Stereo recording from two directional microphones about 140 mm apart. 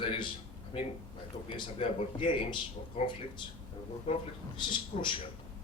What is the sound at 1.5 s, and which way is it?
A man's voice, 40° left (ahead or behind).